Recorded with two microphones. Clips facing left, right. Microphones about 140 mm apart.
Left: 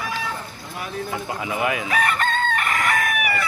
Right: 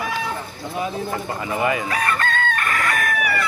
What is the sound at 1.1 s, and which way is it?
Speech, 5° left (ahead or behind).